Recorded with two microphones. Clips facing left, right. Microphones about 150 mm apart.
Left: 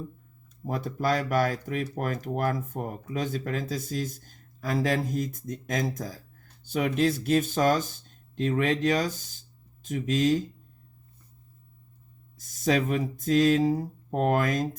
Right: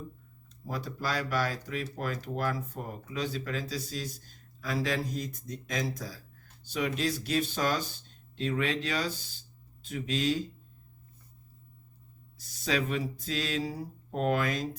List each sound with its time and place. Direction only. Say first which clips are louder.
0.6 s speech: left 7 dB; 55° left (ahead or behind)
12.4 s speech: left 6 dB; 45° left (ahead or behind)